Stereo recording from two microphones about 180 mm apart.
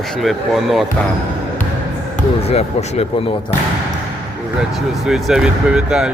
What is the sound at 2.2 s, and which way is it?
Speech, 35° left (ahead or behind).